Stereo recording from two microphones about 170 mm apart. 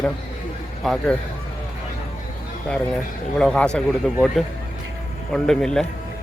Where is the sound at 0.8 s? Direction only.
Centre (ahead or behind).